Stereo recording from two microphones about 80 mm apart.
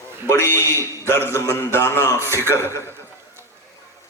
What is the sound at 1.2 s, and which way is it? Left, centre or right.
A man's voice, left.